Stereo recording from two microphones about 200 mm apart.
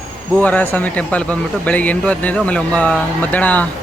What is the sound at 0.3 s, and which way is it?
Speech, 10° left (ahead or behind).